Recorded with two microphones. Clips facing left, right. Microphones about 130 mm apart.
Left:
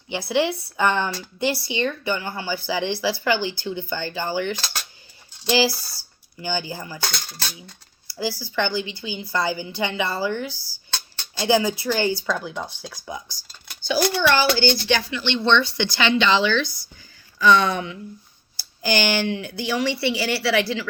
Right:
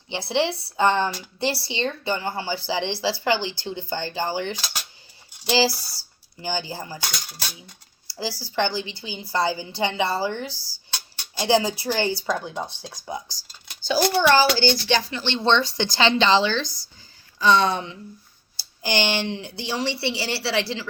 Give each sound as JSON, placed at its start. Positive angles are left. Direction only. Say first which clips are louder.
{"t": 0.1, "sound": "a woman's voice", "louder": "left 2 dB", "side_deg": -25}
{"t": 8.0, "sound": "a woman's voice", "louder": "left 3 dB", "side_deg": -30}
{"t": 16.6, "sound": "speech", "louder": "even", "side_deg": -90}
{"t": 17.4, "sound": "a woman's voice", "louder": "left 1 dB", "side_deg": -30}